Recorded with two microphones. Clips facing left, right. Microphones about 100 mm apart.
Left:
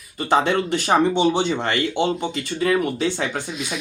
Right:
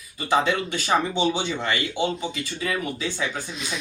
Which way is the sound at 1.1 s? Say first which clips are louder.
Left 5 dB; 65° left (ahead or behind).